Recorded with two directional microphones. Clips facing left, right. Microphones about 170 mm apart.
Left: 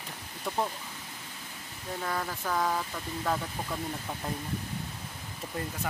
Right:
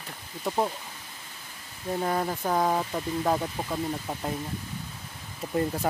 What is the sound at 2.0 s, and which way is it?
Speech, 30° right (ahead or behind).